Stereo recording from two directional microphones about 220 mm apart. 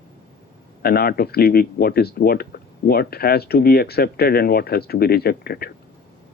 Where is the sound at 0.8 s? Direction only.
45° left (ahead or behind).